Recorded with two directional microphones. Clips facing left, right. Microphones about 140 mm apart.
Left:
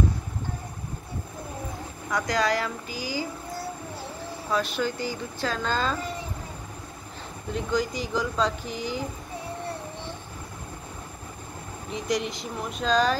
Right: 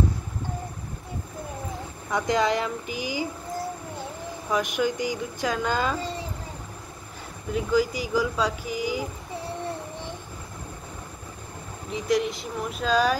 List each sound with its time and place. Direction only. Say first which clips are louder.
2.0 s speech: right 2 dB; 25° right (ahead or behind)
4.5 s speech: right 2 dB; 15° right (ahead or behind)
7.5 s speech: right 4 dB; 5° right (ahead or behind)
11.9 s speech: right 4 dB; centre (ahead or behind)